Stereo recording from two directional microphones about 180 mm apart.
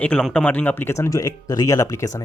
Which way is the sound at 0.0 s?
5° left (ahead or behind).